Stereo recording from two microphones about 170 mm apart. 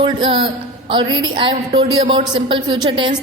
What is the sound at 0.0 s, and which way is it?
A woman's voice, 30° right (ahead or behind).